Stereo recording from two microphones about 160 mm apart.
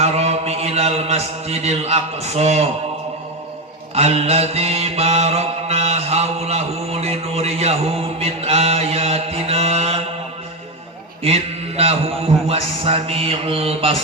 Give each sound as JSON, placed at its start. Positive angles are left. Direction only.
{"t": 0.0, "sound": "mantra", "side_deg": -40}
{"t": 3.9, "sound": "mantra", "side_deg": -40}
{"t": 11.2, "sound": "mantra", "side_deg": -40}